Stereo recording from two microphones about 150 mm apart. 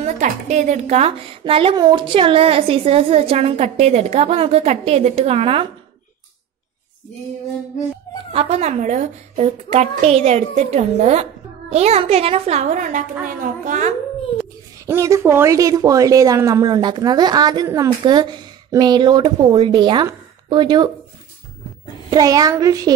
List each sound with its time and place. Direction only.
0.0 s a woman's voice: 55° right (ahead or behind)
8.3 s a woman's voice: 40° right (ahead or behind); by 13.9 s 60° right (ahead or behind)
14.9 s a woman's voice: 20° right (ahead or behind)
22.1 s a woman's voice: 25° right (ahead or behind)